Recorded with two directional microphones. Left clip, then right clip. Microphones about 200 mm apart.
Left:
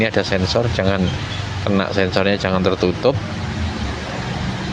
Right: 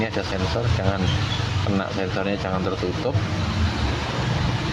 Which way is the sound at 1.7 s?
30° left (ahead or behind).